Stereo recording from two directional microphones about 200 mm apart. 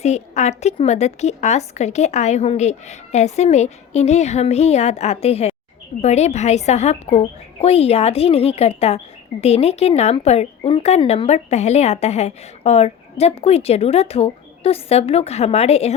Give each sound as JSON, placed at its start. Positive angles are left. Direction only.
{"t": 0.0, "sound": "speech", "side_deg": 35}